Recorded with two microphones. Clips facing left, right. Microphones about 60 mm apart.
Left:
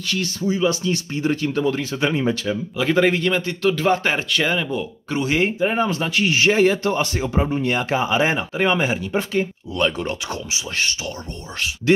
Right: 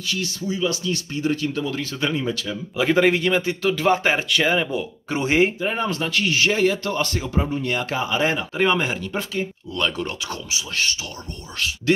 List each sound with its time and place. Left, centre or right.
0.0 s speech: left
0.4 s speech: left
1.9 s speech: left
2.8 s a man's voice: centre
5.1 s speech: right
5.6 s speech: centre
8.5 s speech: centre; by 11.0 s left